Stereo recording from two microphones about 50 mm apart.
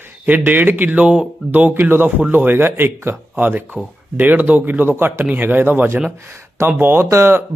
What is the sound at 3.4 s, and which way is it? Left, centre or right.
A man's voice, right.